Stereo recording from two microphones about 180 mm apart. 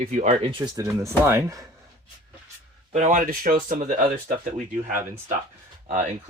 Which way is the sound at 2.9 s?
45° right (ahead or behind).